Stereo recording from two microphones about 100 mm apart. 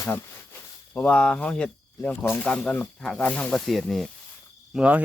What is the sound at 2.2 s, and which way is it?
Speech, 20° left (ahead or behind).